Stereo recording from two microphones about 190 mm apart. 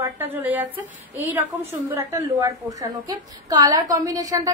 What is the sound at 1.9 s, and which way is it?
A woman's voice, 15° right (ahead or behind).